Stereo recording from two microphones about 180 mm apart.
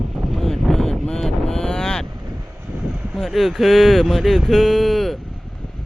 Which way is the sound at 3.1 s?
Centre (ahead or behind).